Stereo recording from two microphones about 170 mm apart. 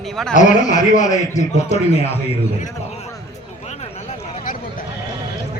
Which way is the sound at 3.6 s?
40° left (ahead or behind).